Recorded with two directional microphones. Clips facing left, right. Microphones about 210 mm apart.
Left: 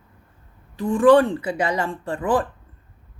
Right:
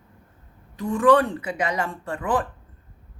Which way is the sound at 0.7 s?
30° left (ahead or behind).